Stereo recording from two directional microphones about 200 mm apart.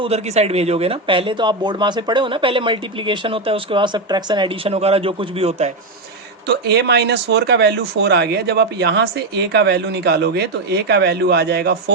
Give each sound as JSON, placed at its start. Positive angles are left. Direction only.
{"t": 0.0, "sound": "speech", "side_deg": -30}
{"t": 6.5, "sound": "speech", "side_deg": -55}